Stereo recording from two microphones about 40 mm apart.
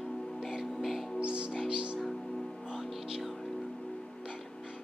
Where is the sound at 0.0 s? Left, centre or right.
Centre.